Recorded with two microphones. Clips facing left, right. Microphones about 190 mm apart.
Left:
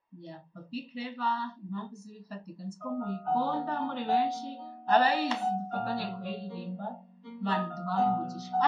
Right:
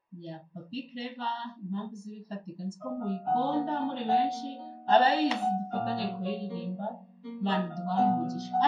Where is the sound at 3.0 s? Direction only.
25° right (ahead or behind).